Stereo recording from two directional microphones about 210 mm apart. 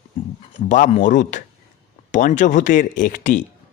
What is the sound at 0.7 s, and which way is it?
Speech, 35° left (ahead or behind).